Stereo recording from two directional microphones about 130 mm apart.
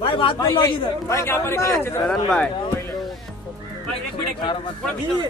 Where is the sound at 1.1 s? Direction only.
20° left (ahead or behind).